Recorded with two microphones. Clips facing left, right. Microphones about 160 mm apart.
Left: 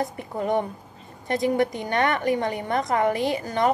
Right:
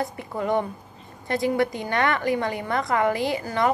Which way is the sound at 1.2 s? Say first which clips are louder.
Left 1 dB; 20° left (ahead or behind).